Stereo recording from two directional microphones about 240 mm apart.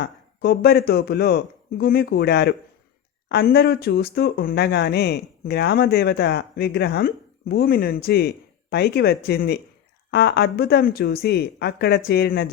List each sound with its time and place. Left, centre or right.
0.0 s speech: left